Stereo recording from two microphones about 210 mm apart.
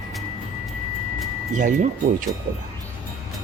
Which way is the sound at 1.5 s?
40° right (ahead or behind).